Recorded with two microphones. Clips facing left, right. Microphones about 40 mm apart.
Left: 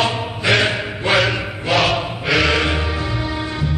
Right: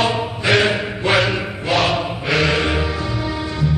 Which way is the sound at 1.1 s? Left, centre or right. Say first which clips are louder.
Even; centre.